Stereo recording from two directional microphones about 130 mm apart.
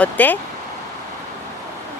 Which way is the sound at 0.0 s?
15° left (ahead or behind).